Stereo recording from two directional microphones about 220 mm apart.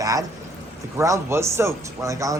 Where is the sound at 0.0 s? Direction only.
15° right (ahead or behind).